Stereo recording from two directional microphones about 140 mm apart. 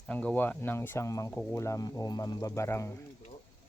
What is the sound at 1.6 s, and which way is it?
Speech, 20° left (ahead or behind).